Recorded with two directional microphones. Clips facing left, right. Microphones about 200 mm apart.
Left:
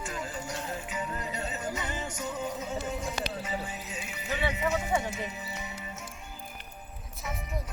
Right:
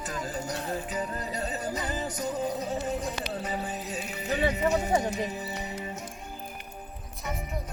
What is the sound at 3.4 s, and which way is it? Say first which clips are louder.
Speech: right 3 dB; 35° right (ahead or behind).